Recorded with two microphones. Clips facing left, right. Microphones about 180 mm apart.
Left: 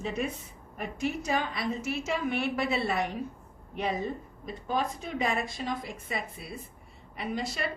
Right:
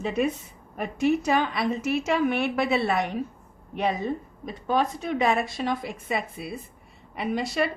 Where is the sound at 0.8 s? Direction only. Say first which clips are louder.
Right 8 dB; 70° right (ahead or behind).